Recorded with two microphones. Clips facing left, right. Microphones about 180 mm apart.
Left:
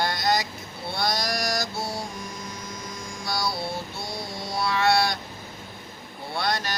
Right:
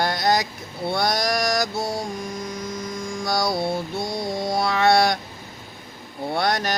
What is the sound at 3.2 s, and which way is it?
Mantra, 50° right (ahead or behind).